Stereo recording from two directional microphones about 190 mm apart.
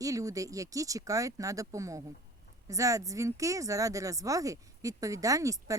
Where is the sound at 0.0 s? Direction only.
20° right (ahead or behind).